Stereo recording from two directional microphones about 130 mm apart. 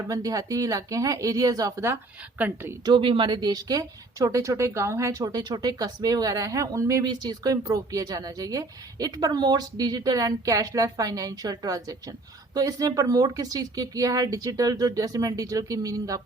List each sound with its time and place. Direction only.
0.1 s a woman's voice: 25° right (ahead or behind)
2.8 s speech: 40° right (ahead or behind)